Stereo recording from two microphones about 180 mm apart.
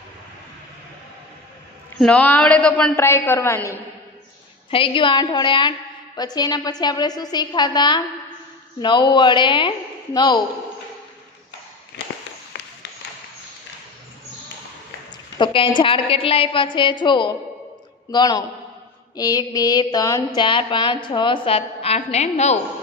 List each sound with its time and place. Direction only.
2.0 s a woman's voice: 5° left (ahead or behind)
4.6 s a woman's voice: 30° left (ahead or behind)
12.5 s tap: 75° left (ahead or behind)
15.3 s a woman's voice: 25° left (ahead or behind)